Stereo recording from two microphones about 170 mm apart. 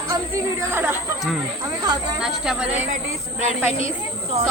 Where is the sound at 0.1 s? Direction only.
15° right (ahead or behind).